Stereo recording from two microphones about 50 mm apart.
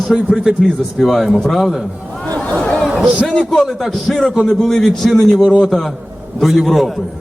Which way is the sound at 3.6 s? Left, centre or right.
Centre.